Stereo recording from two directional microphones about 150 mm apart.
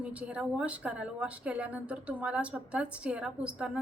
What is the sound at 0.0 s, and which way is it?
A woman's voice, 10° right (ahead or behind).